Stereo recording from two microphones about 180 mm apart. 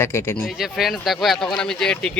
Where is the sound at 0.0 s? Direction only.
15° left (ahead or behind).